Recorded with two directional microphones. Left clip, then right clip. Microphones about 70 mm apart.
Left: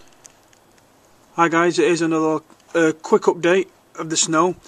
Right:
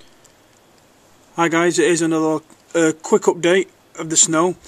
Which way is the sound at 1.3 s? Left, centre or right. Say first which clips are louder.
Even; centre.